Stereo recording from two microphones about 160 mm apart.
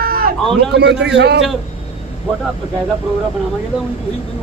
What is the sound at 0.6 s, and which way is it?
Speech, 90° right.